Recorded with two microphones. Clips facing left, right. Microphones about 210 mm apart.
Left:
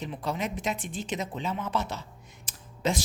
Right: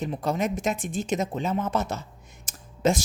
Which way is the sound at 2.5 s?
45° right (ahead or behind).